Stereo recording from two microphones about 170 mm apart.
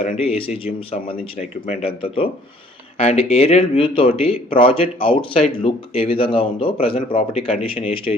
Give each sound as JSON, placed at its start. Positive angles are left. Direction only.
{"t": 0.2, "sound": "speech", "side_deg": 35}